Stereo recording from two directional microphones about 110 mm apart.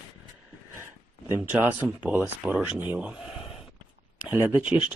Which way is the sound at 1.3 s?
20° right (ahead or behind).